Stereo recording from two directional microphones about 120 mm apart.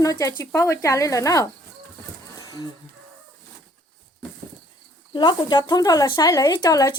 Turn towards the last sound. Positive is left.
turn(degrees=35)  # may be behind; listen again after turning